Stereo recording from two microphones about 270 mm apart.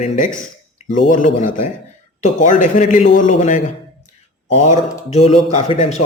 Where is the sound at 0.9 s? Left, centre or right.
Left.